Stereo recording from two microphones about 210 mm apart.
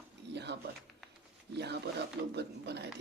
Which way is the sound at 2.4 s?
55° right (ahead or behind).